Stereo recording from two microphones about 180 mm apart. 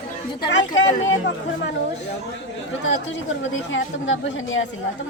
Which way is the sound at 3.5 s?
90° left.